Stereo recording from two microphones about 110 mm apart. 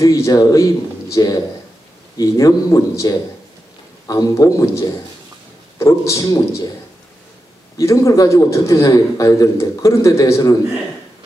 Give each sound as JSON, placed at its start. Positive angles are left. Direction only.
{"t": 0.0, "sound": "a man's voice", "side_deg": 30}
{"t": 7.7, "sound": "a man's voice", "side_deg": 30}